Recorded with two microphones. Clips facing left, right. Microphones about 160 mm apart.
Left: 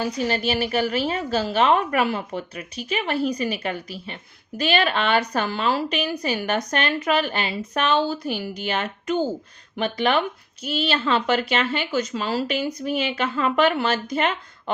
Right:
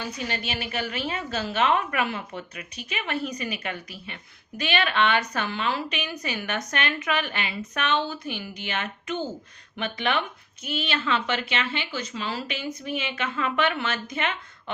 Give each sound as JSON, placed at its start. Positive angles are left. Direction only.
{"t": 0.0, "sound": "a woman's voice", "side_deg": 35}